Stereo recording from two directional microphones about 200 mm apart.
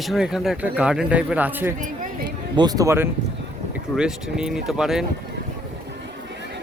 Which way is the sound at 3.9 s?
5° right (ahead or behind).